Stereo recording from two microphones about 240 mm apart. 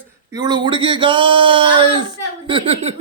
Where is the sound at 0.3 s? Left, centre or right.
Centre.